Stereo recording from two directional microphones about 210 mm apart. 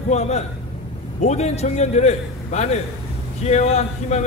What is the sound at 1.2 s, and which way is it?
A man's voice, 30° left (ahead or behind).